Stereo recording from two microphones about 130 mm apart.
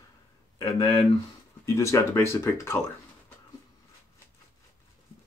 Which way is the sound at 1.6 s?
25° left (ahead or behind).